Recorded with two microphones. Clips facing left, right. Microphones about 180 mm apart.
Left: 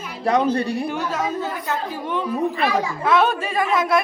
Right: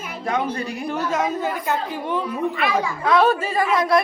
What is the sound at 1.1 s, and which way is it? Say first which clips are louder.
Speech: right 2 dB; 15° right (ahead or behind).